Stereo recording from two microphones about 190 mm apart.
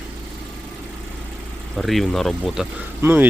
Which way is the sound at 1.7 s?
Centre (ahead or behind).